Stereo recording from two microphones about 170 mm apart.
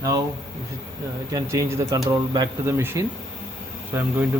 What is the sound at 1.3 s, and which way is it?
Speech, 15° right (ahead or behind).